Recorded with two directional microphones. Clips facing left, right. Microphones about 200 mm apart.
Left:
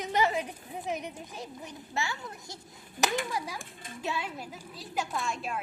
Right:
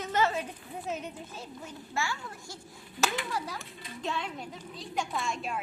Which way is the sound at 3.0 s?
45° left (ahead or behind).